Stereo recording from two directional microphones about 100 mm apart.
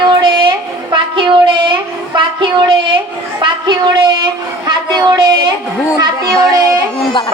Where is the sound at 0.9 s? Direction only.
60° right (ahead or behind).